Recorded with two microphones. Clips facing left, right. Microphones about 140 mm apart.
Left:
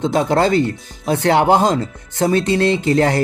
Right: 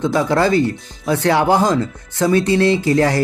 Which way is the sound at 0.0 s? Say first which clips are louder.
Even; 25° left (ahead or behind).